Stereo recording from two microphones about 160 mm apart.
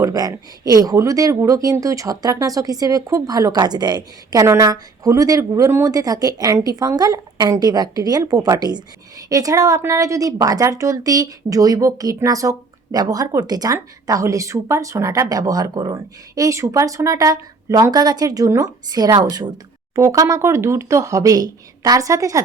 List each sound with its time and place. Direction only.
0.0 s speech: 25° right (ahead or behind)